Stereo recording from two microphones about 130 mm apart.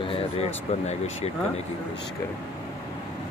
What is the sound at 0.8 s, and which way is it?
Speech, 55° left (ahead or behind).